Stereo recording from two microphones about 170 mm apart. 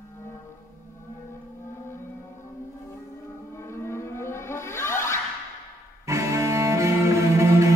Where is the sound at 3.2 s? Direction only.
15° left (ahead or behind).